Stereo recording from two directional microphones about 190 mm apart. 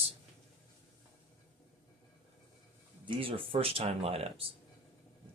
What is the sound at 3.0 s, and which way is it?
Speech, 30° right (ahead or behind).